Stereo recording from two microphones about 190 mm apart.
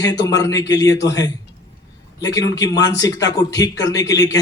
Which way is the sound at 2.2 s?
20° left (ahead or behind).